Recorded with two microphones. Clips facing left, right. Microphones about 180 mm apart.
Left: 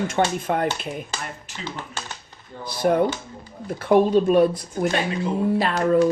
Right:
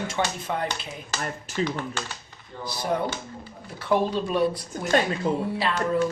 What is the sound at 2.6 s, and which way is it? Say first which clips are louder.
Speech: left 7 dB; 55° left (ahead or behind).